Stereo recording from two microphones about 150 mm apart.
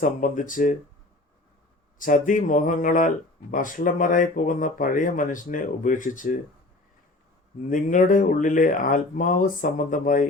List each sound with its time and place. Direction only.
0.0 s speech: 60° left (ahead or behind)
2.0 s speech: 60° left (ahead or behind)
7.7 s speech: 60° left (ahead or behind)